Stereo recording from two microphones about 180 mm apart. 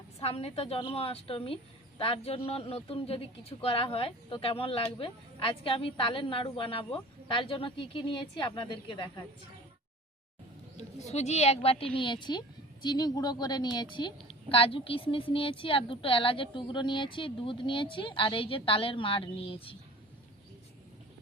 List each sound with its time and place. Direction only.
0.2 s a man's voice: 35° left (ahead or behind)
10.8 s a man's voice: 40° left (ahead or behind)